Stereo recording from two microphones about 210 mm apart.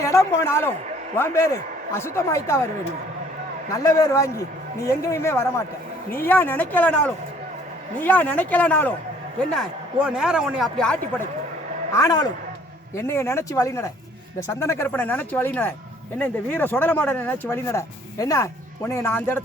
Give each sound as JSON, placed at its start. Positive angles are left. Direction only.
{"t": 0.0, "sound": "speech", "side_deg": 15}
{"t": 3.7, "sound": "a man's voice", "side_deg": 15}
{"t": 11.9, "sound": "speech", "side_deg": 15}